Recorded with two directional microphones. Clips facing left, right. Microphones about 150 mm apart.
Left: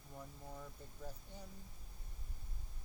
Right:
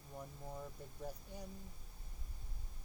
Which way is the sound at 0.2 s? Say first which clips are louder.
Right 3 dB; 15° right (ahead or behind).